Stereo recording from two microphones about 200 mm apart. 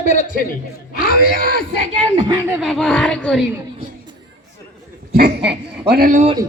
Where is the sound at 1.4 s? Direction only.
45° right (ahead or behind).